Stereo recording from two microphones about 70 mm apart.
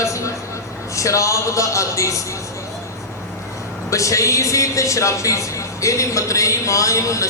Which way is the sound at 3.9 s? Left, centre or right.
Left.